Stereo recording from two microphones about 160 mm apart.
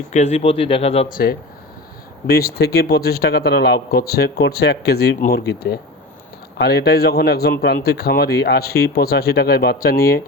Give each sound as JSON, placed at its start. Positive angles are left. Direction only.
{"t": 0.1, "sound": "speech", "side_deg": 45}
{"t": 1.1, "sound": "a man's voice", "side_deg": 70}